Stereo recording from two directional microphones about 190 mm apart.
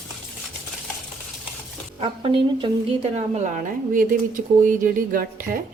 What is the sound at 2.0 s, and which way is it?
A woman's voice, 30° right (ahead or behind).